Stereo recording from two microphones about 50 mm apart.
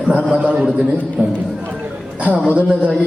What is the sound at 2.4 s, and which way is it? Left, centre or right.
Speech, left.